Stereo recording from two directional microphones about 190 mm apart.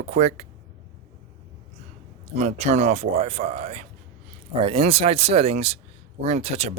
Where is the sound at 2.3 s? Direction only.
35° right (ahead or behind).